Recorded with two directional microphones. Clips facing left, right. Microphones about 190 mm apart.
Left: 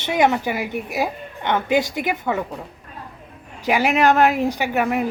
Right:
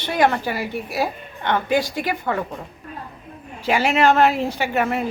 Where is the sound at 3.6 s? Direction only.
15° left (ahead or behind).